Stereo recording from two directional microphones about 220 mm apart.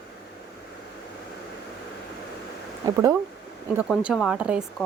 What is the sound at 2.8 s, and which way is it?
Speech, 15° right (ahead or behind).